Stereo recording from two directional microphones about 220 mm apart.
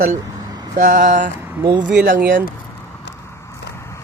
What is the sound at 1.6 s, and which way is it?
Speech, 20° right (ahead or behind).